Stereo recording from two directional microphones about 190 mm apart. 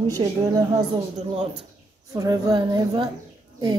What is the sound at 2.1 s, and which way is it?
Speech, 20° right (ahead or behind).